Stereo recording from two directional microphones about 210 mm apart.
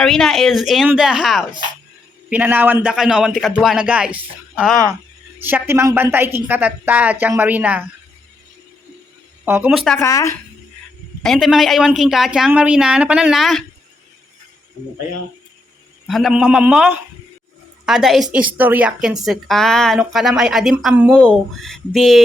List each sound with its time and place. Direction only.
0.0 s a woman's voice: centre (ahead or behind)
9.4 s speech: 10° right (ahead or behind)
9.7 s a woman's voice: 5° left (ahead or behind)
10.1 s speech: 15° left (ahead or behind)
11.2 s a woman's voice: centre (ahead or behind)
16.0 s a woman's voice: centre (ahead or behind)